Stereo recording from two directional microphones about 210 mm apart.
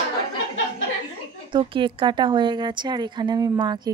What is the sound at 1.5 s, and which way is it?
Speech, 25° right (ahead or behind).